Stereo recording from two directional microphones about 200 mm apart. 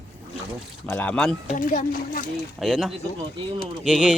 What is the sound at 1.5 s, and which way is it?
Speech, 45° left (ahead or behind).